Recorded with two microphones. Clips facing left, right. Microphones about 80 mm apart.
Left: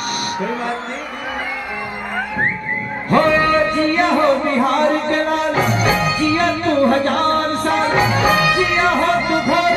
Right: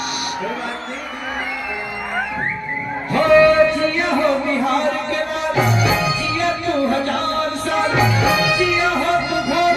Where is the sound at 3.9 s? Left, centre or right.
Left.